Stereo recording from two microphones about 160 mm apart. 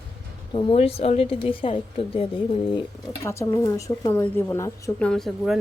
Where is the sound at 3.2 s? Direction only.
15° left (ahead or behind).